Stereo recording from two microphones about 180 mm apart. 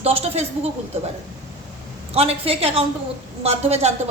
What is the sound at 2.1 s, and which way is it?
A woman's voice, 35° right (ahead or behind).